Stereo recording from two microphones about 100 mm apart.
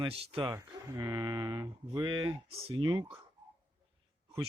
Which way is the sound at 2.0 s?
55° right (ahead or behind).